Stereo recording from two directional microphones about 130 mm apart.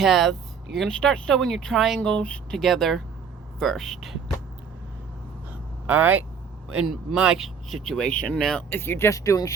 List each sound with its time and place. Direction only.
0.0 s speech: centre (ahead or behind)
5.8 s speech: 15° right (ahead or behind); by 8.6 s 5° left (ahead or behind)
8.7 s speech: 15° left (ahead or behind)